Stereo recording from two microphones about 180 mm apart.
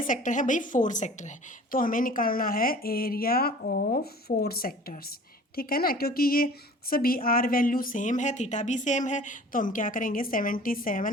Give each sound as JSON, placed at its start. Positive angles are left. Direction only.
{"t": 0.0, "sound": "a woman's voice", "side_deg": 45}